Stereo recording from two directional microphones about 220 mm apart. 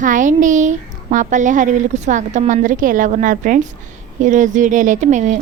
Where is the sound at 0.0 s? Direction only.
35° right (ahead or behind).